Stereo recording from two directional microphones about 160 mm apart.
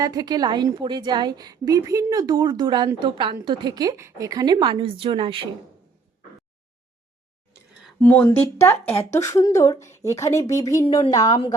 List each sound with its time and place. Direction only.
0.0 s a woman's voice: 25° right (ahead or behind)
8.0 s speech: 10° left (ahead or behind)
10.8 s speech: 30° left (ahead or behind)